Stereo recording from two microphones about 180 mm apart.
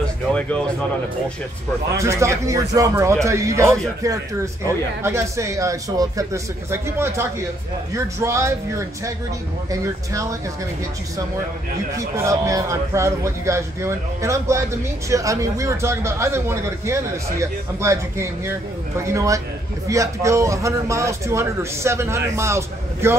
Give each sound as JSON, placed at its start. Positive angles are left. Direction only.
{"t": 0.0, "sound": "a sound", "side_deg": 5}
{"t": 2.0, "sound": "a man's voice", "side_deg": -15}
{"t": 12.2, "sound": "a man's voice", "side_deg": -15}